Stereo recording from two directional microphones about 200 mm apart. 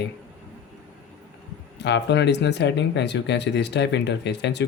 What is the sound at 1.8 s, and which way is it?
Speech, 60° left (ahead or behind).